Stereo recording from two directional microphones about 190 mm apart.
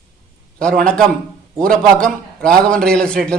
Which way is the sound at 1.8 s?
5° left (ahead or behind).